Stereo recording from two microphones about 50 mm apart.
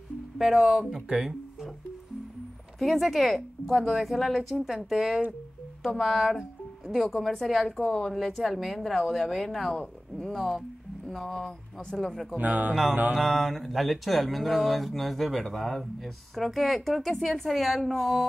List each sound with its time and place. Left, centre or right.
0.4 s speech: centre
2.8 s speech: centre
7.4 s speech: centre
7.7 s speech: centre
12.4 s speech: right
13.1 s mantra: centre
13.5 s speech: centre